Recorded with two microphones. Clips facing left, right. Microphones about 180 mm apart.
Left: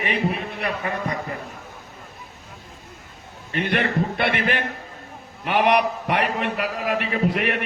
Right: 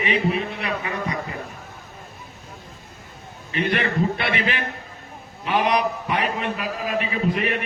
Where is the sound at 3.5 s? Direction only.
55° left (ahead or behind).